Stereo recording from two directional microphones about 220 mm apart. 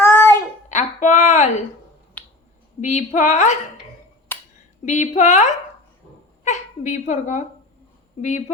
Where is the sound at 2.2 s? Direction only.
5° left (ahead or behind).